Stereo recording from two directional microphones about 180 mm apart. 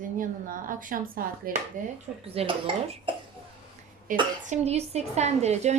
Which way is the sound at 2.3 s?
35° right (ahead or behind).